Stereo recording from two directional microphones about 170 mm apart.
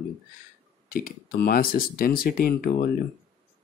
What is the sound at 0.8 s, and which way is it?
Speech, 60° left (ahead or behind).